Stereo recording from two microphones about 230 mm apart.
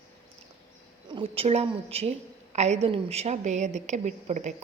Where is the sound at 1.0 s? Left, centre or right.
Right.